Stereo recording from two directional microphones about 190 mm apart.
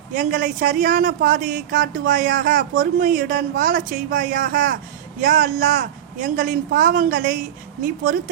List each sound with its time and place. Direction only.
0.1 s speech: 45° right (ahead or behind)